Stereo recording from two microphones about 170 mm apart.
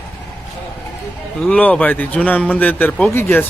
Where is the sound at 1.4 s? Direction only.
5° left (ahead or behind).